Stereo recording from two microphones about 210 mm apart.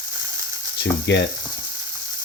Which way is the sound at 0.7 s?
55° left (ahead or behind).